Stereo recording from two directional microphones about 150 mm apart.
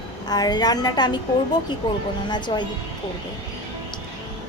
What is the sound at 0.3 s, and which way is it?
Speech, 25° left (ahead or behind).